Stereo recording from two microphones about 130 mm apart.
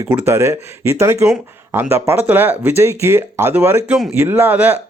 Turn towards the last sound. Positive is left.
turn(degrees=-15)  # may be behind; listen again after turning